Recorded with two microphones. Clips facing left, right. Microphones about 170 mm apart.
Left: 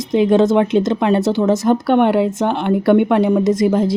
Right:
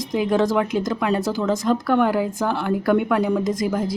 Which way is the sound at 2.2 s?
80° left.